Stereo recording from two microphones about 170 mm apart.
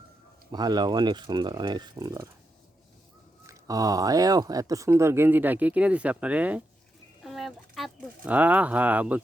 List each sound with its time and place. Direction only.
0.5 s speech: 25° right (ahead or behind)
3.4 s speech: 20° right (ahead or behind)